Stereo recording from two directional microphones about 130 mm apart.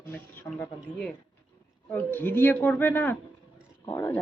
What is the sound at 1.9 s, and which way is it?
A woman's voice, 15° left (ahead or behind).